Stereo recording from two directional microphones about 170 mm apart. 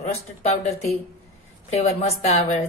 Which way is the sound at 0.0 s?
40° left (ahead or behind).